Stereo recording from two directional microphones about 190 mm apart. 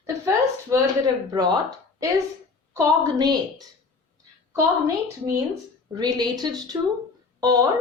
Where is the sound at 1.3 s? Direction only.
20° right (ahead or behind).